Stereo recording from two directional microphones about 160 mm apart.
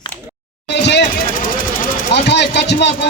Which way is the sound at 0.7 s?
90° left.